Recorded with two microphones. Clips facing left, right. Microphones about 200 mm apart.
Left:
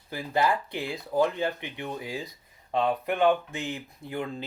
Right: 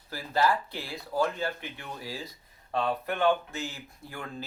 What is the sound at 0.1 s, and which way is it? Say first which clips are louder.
Speech: left 1 dB; 20° left (ahead or behind).